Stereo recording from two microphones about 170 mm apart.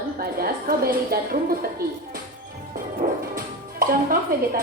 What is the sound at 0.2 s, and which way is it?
A woman's voice, 60° right (ahead or behind).